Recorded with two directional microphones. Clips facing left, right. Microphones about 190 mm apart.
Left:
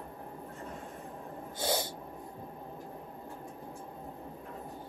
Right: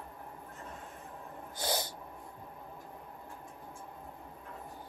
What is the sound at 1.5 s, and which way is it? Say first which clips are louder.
Owl: left 3 dB; 25° left (ahead or behind).